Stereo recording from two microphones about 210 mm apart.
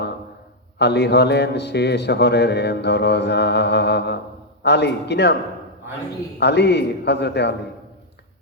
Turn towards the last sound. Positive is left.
turn(degrees=55)  # may be behind; listen again after turning